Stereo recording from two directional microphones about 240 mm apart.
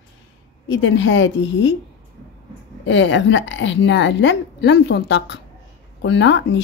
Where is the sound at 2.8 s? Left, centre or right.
Left.